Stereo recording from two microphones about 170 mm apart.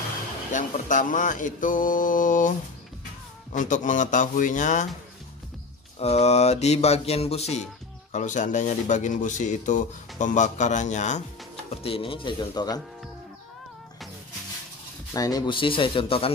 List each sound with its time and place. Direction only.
0.5 s speech: 50° left (ahead or behind)
3.5 s speech: 50° left (ahead or behind)
5.9 s a sound: 40° left (ahead or behind)
8.1 s speech: 45° left (ahead or behind)
11.7 s a sound: 35° left (ahead or behind)
15.1 s speech: 20° left (ahead or behind)